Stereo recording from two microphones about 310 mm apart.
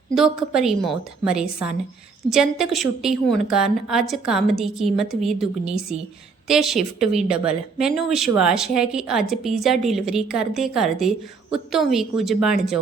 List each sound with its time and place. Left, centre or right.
0.1 s a woman's voice: centre
6.5 s a woman's voice: centre